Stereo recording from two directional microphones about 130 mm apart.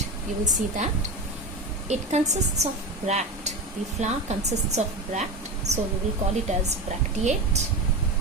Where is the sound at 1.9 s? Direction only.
60° right (ahead or behind).